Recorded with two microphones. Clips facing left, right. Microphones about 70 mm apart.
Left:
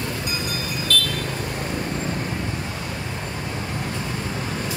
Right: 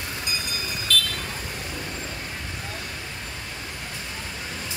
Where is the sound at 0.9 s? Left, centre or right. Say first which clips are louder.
Left 1 dB; left.